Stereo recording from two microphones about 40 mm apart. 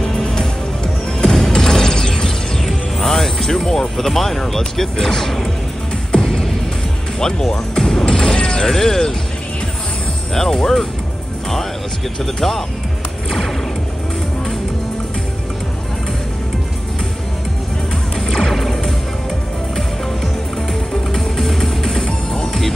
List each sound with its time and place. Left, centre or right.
0.0 s music: centre
7.2 s speech: centre
8.0 s music: centre
8.6 s speech: centre
10.3 s speech: centre
12.4 s speech: centre
18.2 s music: centre
20.9 s music: centre